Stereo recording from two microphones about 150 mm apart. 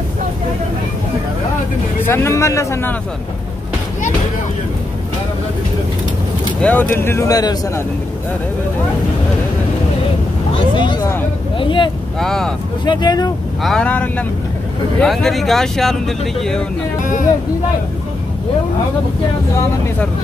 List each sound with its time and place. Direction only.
2.0 s speech: 15° left (ahead or behind)
6.6 s speech: 10° left (ahead or behind)
10.7 s speech: 30° left (ahead or behind)
12.2 s speech: 5° left (ahead or behind)
12.8 s speech: 30° left (ahead or behind)
13.6 s speech: 5° left (ahead or behind)